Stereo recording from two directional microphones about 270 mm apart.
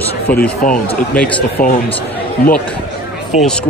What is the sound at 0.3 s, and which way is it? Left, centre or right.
Speech, left.